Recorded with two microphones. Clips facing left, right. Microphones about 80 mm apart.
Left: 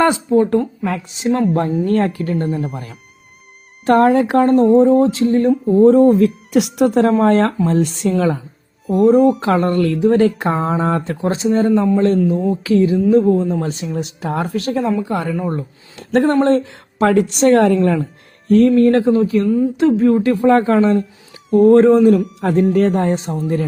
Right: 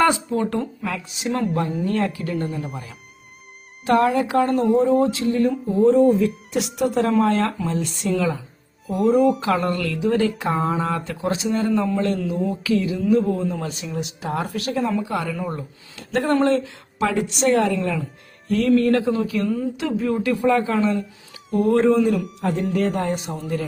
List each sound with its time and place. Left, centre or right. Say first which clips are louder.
0.0 s speech: left 5 dB; left
0.9 s speech: left 7 dB; left
3.8 s speech: left 6 dB; left
6.7 s speech: left 4 dB; left
8.9 s speech: left 6 dB; centre
9.4 s speech: left 6 dB; left
18.4 s speech: left 7 dB; left
23.1 s speech: left 7 dB; left